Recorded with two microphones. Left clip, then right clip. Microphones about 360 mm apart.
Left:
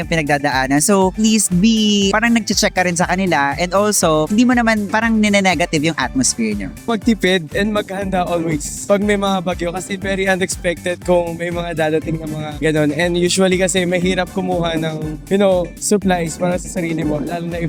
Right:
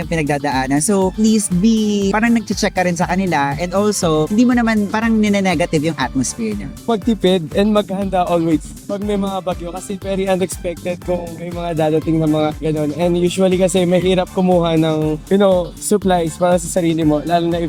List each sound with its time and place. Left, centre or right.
0.1 s speech: left